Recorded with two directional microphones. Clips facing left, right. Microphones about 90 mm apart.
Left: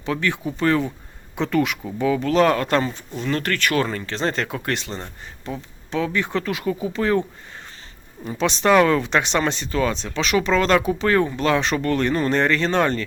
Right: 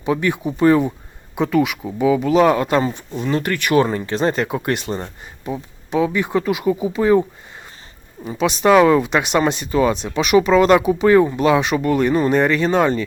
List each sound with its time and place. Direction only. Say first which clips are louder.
0.0 s speech: right 4 dB; 15° right (ahead or behind)